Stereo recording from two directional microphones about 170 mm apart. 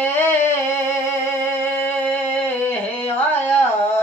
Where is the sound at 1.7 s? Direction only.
10° left (ahead or behind).